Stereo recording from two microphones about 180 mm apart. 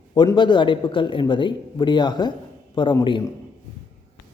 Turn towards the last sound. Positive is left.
turn(degrees=25)  # may be behind; listen again after turning